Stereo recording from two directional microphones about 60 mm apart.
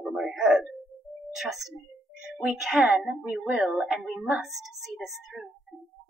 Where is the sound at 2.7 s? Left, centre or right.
Centre.